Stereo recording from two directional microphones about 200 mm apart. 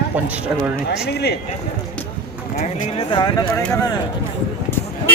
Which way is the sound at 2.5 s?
35° left (ahead or behind).